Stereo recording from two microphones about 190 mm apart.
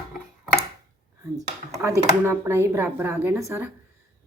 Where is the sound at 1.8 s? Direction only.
15° right (ahead or behind).